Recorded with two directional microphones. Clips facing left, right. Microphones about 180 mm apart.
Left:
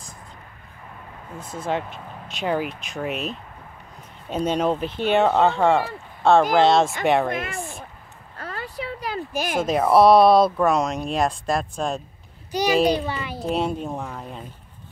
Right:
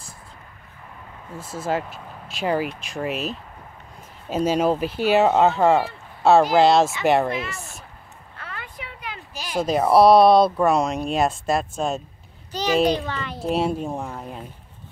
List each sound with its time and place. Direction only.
1.4 s speech: 5° right (ahead or behind)
7.3 s speech: 50° left (ahead or behind)
8.4 s a sound: 35° left (ahead or behind)
9.3 s a sound: 55° left (ahead or behind)
9.6 s speech: centre (ahead or behind)
12.7 s a child's voice: 10° left (ahead or behind)
13.4 s speech: centre (ahead or behind)